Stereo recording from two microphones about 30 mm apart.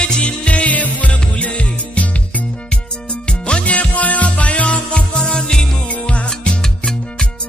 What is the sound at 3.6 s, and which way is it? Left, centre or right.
Music, left.